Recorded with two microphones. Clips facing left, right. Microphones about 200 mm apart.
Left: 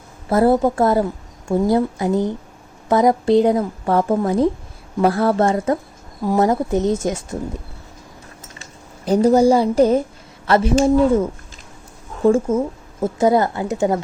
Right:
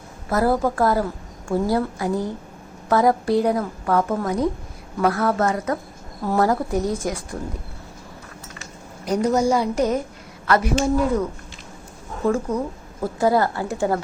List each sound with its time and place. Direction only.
0.3 s a woman's voice: 25° left (ahead or behind)
9.0 s a woman's voice: 30° left (ahead or behind)